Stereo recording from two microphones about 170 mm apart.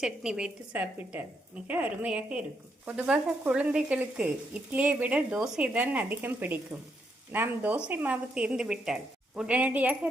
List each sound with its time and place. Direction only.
0.0 s a woman's voice: 5° right (ahead or behind)